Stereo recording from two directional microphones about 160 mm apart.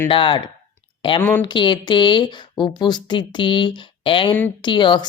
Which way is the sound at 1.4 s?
30° left (ahead or behind).